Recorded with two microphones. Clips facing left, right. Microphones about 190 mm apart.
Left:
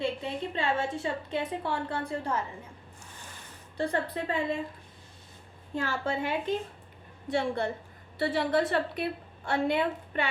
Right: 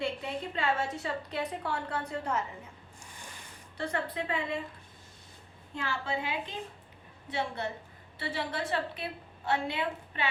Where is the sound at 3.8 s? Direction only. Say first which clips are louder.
Left 4 dB; 35° left (ahead or behind).